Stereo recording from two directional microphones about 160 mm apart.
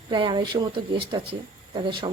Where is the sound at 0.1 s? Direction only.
30° right (ahead or behind).